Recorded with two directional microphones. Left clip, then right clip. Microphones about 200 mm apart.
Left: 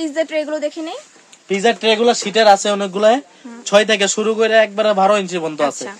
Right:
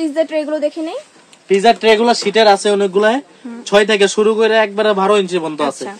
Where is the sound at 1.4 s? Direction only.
35° left (ahead or behind).